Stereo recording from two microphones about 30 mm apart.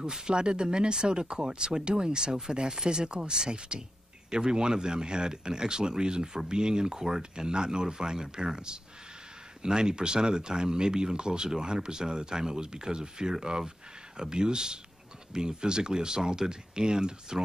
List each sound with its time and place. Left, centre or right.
0.1 s speech: right